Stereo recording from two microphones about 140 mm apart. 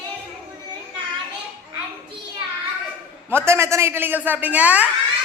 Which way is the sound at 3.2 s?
15° right (ahead or behind).